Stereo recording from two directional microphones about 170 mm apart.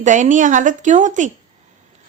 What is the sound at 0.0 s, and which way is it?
A woman's voice, 45° right (ahead or behind).